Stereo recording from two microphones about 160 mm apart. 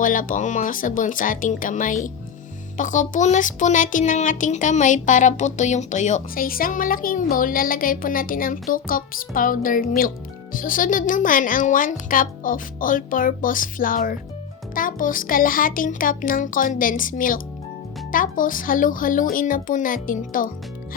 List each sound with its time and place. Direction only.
0.0 s speech: 55° left (ahead or behind)